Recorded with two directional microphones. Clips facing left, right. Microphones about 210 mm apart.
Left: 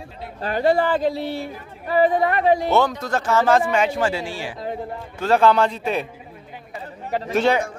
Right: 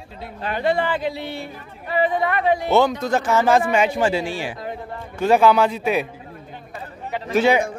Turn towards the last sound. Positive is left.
turn(degrees=-10)  # may be behind; listen again after turning